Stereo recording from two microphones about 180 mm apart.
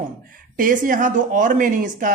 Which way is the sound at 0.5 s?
50° right (ahead or behind).